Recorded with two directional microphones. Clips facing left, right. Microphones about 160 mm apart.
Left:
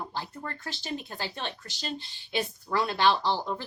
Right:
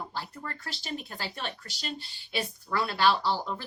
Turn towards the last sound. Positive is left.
turn(degrees=20)  # may be behind; listen again after turning